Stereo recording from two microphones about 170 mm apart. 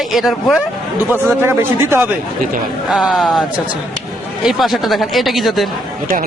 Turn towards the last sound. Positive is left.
turn(degrees=0)  # may be behind; listen again after turning